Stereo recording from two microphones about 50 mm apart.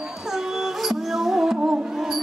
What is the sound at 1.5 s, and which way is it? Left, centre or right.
Music, right.